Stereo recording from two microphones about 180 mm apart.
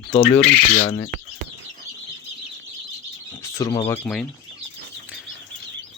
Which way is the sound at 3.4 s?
15° left (ahead or behind).